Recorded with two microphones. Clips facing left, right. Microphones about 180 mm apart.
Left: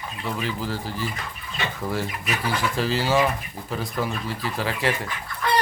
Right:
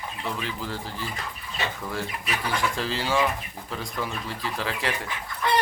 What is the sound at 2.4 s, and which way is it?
Speech, 5° left (ahead or behind).